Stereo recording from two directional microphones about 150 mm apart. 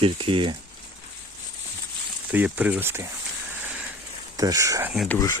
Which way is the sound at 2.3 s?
10° right (ahead or behind).